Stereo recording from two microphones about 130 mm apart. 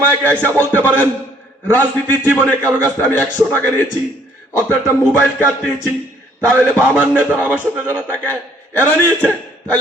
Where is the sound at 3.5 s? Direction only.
15° left (ahead or behind).